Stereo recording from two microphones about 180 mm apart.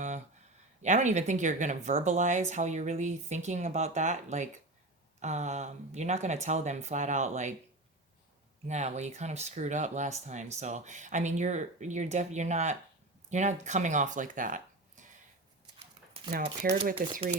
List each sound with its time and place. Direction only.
0.8 s speech: 40° right (ahead or behind)
8.6 s speech: 40° right (ahead or behind)
16.3 s speech: 60° right (ahead or behind)